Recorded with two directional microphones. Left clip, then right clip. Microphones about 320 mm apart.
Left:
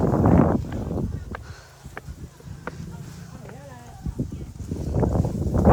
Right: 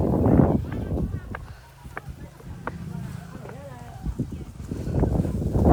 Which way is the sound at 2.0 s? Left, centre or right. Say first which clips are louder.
Right 2 dB; centre.